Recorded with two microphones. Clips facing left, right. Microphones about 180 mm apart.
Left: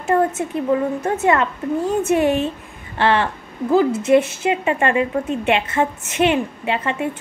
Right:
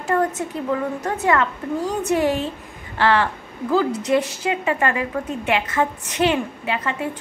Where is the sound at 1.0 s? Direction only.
25° left (ahead or behind).